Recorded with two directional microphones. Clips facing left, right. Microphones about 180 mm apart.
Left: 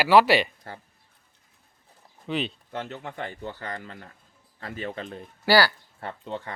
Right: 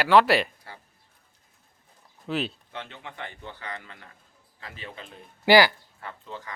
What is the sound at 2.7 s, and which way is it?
Speech, 45° left (ahead or behind).